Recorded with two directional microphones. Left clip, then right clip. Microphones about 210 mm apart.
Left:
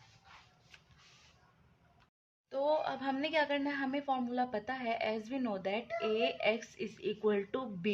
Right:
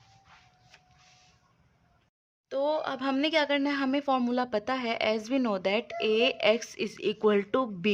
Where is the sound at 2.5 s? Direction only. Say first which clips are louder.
Right 4 dB; 30° right (ahead or behind).